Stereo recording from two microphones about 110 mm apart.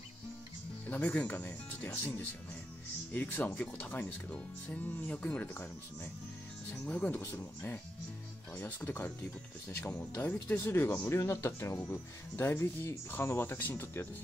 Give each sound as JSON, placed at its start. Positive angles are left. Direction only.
{"t": 0.8, "sound": "speech", "side_deg": 15}
{"t": 3.1, "sound": "speech", "side_deg": 15}